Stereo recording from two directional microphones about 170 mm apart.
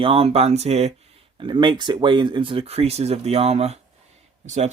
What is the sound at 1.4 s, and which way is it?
Speech, 30° right (ahead or behind).